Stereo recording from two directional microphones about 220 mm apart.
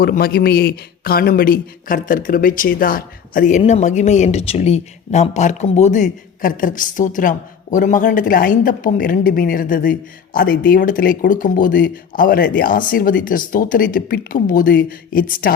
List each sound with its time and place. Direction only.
0.0 s speech: 45° left (ahead or behind)